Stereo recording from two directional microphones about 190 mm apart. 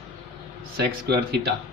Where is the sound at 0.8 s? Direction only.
60° right (ahead or behind).